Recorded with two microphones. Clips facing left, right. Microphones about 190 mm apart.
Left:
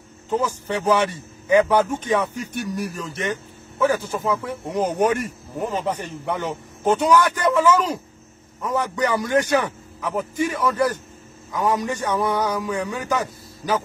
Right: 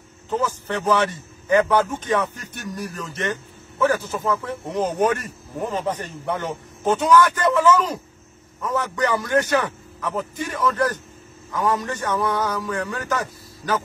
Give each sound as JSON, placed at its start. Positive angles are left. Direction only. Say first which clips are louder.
{"t": 0.3, "sound": "speech", "louder": "left 1 dB", "side_deg": 10}